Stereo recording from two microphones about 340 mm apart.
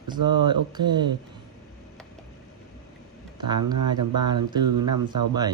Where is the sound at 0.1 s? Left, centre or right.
Centre.